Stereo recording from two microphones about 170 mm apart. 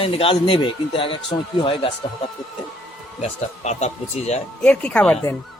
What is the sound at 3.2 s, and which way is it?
Speech, 40° left (ahead or behind).